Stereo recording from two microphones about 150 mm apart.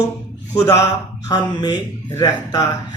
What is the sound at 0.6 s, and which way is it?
Speech, 20° left (ahead or behind).